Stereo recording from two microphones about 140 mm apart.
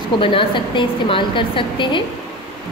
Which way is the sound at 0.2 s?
40° left (ahead or behind).